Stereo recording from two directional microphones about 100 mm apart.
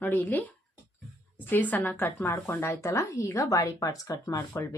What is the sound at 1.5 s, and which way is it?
A woman's voice, 20° left (ahead or behind).